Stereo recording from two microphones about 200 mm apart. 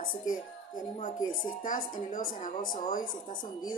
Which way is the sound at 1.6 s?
40° left (ahead or behind).